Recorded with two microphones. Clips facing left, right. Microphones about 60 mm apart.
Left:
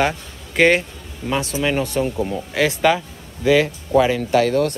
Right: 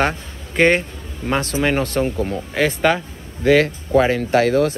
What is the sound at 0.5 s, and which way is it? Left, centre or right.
Speech, centre.